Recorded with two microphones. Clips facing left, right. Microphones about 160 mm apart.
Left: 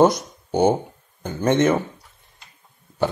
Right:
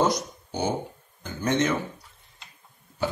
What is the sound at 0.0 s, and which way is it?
Speech, 55° left (ahead or behind).